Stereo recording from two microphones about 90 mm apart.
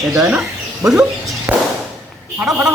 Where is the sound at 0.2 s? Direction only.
10° right (ahead or behind).